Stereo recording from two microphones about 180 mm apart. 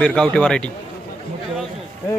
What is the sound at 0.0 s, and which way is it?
Speech, 5° left (ahead or behind).